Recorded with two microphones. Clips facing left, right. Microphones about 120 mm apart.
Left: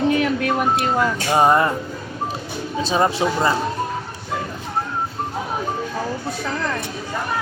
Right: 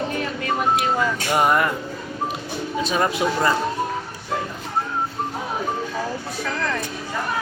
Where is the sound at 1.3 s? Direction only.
30° left (ahead or behind).